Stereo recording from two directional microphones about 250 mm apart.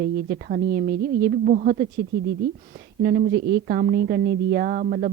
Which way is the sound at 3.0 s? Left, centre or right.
Right.